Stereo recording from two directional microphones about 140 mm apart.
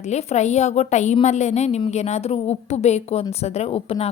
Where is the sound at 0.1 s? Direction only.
50° left (ahead or behind).